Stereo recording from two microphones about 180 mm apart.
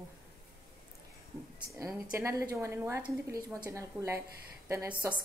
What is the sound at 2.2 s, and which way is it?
A woman's voice, 15° right (ahead or behind).